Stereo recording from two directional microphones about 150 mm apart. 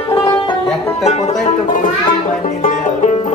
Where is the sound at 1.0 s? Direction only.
45° left (ahead or behind).